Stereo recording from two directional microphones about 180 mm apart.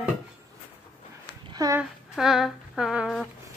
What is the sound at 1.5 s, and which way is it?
Speech, 20° right (ahead or behind).